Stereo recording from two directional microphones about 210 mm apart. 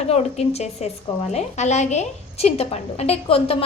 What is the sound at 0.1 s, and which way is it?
A woman's voice, 30° left (ahead or behind).